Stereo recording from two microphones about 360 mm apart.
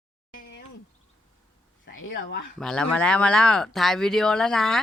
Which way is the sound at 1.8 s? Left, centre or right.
Left.